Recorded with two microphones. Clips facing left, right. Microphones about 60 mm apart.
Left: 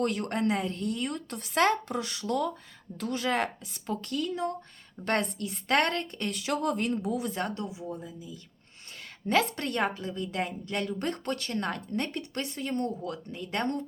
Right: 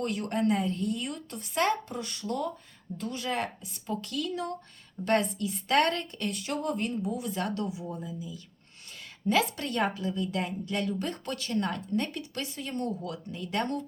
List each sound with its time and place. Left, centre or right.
0.0 s a woman's voice: left
3.0 s a woman's voice: left
3.9 s speech: left
5.0 s speech: left
6.3 s speech: left
6.9 s speech: left
7.4 s speech: left
9.2 s speech: left
9.9 s speech: left
10.4 s speech: left